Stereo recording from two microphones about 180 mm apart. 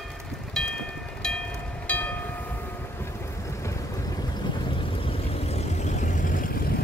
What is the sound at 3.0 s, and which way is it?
Vehicle, 15° left (ahead or behind).